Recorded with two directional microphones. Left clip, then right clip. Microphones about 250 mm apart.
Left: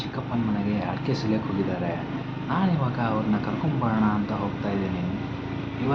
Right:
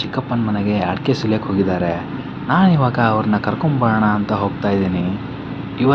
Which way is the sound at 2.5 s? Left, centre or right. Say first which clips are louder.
Right 11 dB; right.